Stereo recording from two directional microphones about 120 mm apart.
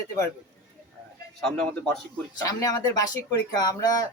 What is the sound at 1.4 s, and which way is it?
Speech, 5° left (ahead or behind).